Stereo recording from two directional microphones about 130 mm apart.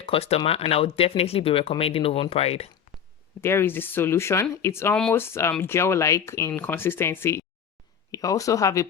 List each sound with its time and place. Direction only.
0.0 s speech: 50° left (ahead or behind)
3.4 s speech: 20° left (ahead or behind)